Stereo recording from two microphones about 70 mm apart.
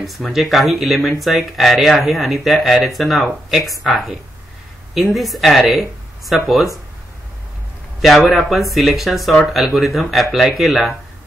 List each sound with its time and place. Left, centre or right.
0.0 s speech: centre
8.0 s speech: centre